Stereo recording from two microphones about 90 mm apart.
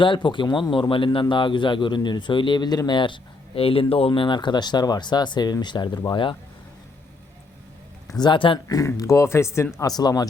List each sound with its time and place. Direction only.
0.0 s a man's voice: 65° left (ahead or behind)
8.2 s a man's voice: 65° left (ahead or behind)
9.0 s speech: 35° left (ahead or behind)
9.7 s speech: 45° left (ahead or behind)